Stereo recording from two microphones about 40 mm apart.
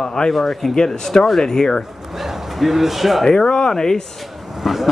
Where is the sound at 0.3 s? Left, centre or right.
Centre.